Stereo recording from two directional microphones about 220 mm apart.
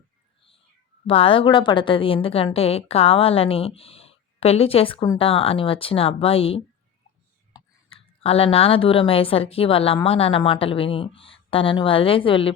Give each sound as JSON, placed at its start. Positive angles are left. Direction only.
{"t": 1.0, "sound": "a woman's voice", "side_deg": 25}